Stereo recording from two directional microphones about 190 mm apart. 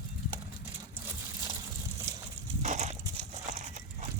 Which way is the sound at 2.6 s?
40° right (ahead or behind).